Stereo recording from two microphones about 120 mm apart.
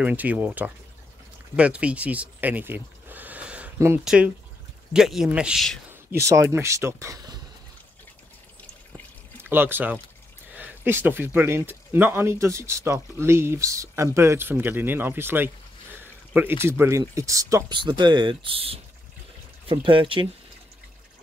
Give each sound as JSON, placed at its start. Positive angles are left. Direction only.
{"t": 0.0, "sound": "speech", "side_deg": -15}
{"t": 4.0, "sound": "speech", "side_deg": -5}
{"t": 5.9, "sound": "speech", "side_deg": -25}
{"t": 9.4, "sound": "speech", "side_deg": -20}
{"t": 17.6, "sound": "speech", "side_deg": -40}